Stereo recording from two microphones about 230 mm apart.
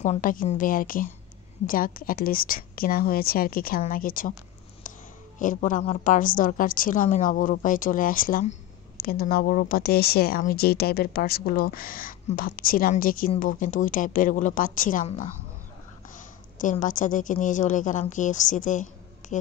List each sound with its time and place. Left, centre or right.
0.0 s speech: left
5.4 s speech: left
16.5 s speech: left